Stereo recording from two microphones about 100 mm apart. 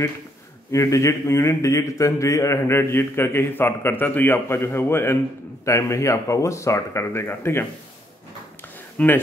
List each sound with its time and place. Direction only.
0.7 s a man's voice: 30° left (ahead or behind)
8.9 s speech: 20° left (ahead or behind)